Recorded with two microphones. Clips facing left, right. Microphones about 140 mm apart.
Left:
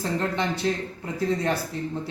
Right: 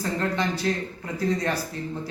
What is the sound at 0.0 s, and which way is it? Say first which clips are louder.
Speech: even; 20° left (ahead or behind).